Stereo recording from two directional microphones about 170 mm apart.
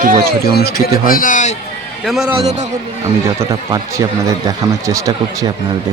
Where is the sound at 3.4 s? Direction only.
20° right (ahead or behind).